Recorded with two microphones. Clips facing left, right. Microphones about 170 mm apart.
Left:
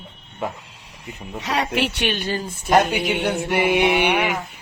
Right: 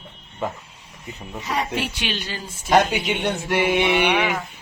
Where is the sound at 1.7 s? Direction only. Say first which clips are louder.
Left 4 dB; 70° left (ahead or behind).